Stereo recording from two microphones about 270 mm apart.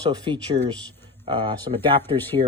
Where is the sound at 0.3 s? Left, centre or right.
Centre.